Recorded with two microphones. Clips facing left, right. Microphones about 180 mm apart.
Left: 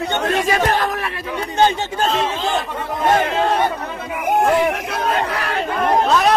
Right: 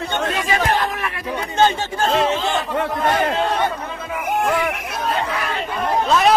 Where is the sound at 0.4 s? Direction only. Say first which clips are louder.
Left 1 dB; 40° left (ahead or behind).